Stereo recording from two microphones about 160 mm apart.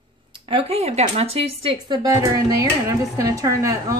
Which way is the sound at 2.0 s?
20° right (ahead or behind).